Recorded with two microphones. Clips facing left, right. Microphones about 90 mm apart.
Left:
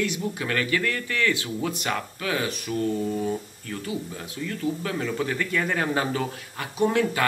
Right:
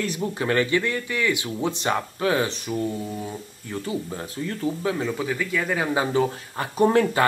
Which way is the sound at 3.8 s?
35° right (ahead or behind).